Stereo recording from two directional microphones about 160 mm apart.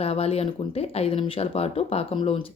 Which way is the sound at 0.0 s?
40° left (ahead or behind).